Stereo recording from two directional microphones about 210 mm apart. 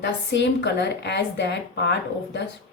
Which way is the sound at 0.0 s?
55° left (ahead or behind).